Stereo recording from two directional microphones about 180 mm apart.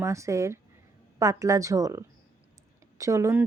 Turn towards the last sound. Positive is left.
turn(degrees=-15)  # may be behind; listen again after turning